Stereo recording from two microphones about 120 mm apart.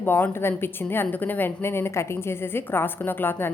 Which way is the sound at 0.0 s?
15° left (ahead or behind).